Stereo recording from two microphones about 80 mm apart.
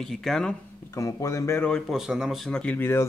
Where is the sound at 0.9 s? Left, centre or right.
Left.